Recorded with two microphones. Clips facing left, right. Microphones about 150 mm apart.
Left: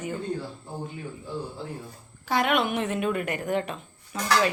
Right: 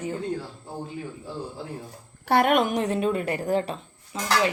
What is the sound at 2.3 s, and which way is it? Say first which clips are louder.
A woman's voice: right 4 dB; 50° right (ahead or behind).